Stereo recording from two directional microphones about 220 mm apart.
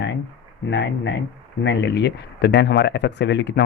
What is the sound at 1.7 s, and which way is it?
Speech, 50° left (ahead or behind).